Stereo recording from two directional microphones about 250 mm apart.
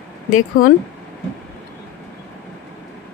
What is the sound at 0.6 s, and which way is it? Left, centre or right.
Speech, left.